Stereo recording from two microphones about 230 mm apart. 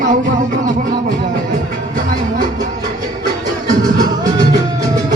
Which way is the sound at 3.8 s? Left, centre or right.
Centre.